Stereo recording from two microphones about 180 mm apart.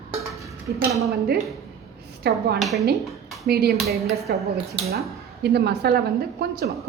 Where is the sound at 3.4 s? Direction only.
60° right (ahead or behind).